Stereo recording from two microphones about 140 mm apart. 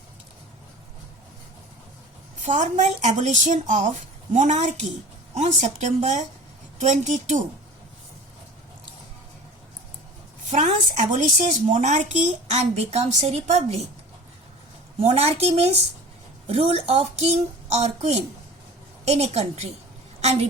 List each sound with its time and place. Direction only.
2.4 s a woman's voice: 60° right (ahead or behind)
10.5 s a woman's voice: 60° right (ahead or behind)
14.9 s speech: 45° right (ahead or behind)